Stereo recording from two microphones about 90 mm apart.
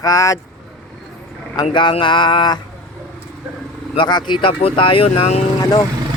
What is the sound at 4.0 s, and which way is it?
Speech, 60° left (ahead or behind).